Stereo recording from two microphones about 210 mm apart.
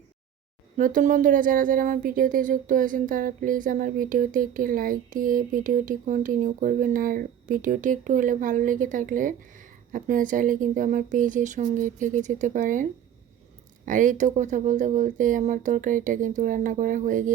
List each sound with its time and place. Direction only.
0.8 s speech: 40° right (ahead or behind)